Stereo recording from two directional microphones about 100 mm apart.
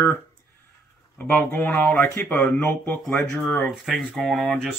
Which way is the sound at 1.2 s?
20° left (ahead or behind).